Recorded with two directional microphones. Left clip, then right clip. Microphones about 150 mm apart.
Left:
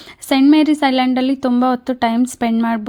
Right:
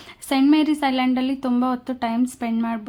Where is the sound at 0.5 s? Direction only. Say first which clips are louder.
Left 6 dB; 40° left (ahead or behind).